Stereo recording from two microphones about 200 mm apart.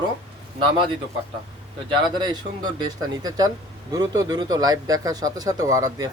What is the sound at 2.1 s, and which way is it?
Speech, 20° right (ahead or behind).